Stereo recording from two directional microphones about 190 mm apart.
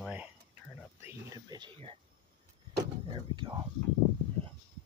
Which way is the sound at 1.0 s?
20° right (ahead or behind).